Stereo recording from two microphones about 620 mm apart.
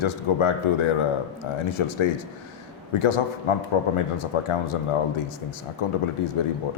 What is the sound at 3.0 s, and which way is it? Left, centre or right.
Speech, left.